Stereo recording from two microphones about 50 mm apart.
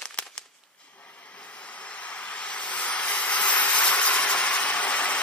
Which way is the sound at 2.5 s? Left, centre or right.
Left.